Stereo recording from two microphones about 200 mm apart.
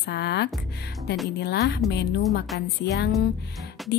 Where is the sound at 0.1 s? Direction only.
55° left (ahead or behind).